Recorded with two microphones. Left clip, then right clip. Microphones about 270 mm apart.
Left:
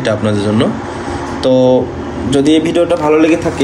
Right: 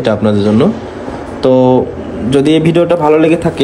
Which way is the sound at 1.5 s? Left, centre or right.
Right.